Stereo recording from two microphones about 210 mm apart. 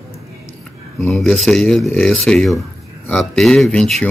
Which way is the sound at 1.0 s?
Centre (ahead or behind).